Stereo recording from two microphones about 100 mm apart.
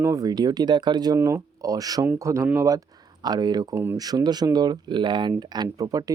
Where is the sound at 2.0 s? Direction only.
25° right (ahead or behind).